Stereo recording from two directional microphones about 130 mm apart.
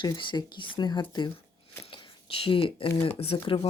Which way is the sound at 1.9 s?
40° left (ahead or behind).